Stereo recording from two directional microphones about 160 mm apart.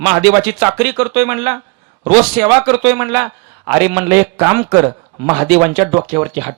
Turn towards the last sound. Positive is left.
turn(degrees=-10)  # may be behind; listen again after turning